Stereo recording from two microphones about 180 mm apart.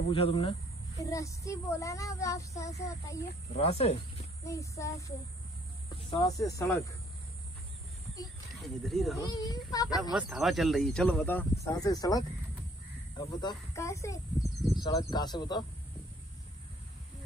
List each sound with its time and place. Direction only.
0.1 s speech: 30° left (ahead or behind)
0.9 s speech: 15° left (ahead or behind)
3.5 s speech: 35° left (ahead or behind)
4.5 s speech: 15° left (ahead or behind)
8.5 s speech: centre (ahead or behind)
9.2 s speech: 20° left (ahead or behind)
10.1 s speech: 5° right (ahead or behind)
11.6 s speech: 20° left (ahead or behind)
14.4 s speech: centre (ahead or behind)
14.8 s speech: 20° left (ahead or behind)